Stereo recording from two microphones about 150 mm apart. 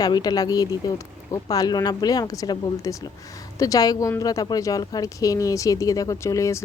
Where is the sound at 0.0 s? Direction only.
25° left (ahead or behind).